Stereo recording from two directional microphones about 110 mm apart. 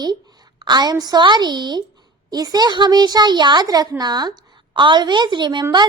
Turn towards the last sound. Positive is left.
turn(degrees=-45)  # may be behind; listen again after turning